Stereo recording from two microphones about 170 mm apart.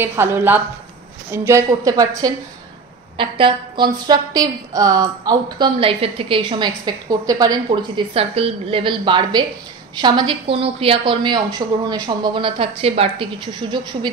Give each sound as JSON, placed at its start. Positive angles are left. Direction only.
{"t": 0.0, "sound": "a woman's voice", "side_deg": -15}